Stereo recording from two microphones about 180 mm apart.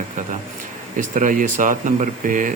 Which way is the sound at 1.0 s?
45° right (ahead or behind).